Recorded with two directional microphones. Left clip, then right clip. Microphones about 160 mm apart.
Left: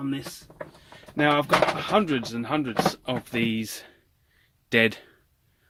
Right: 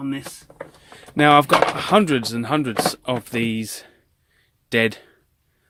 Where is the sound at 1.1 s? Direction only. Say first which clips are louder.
Right 7 dB; 70° right (ahead or behind).